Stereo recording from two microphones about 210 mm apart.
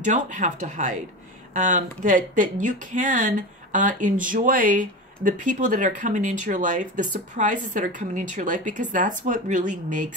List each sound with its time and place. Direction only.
0.0 s speech: 35° right (ahead or behind)